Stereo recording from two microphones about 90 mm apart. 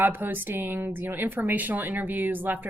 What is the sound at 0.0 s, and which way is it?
Speech, 20° right (ahead or behind).